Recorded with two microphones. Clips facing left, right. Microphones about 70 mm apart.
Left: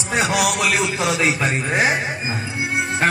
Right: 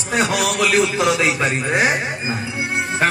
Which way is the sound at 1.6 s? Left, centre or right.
Centre.